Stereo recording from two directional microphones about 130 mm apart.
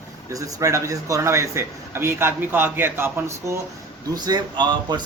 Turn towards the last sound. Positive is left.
turn(degrees=-35)  # may be behind; listen again after turning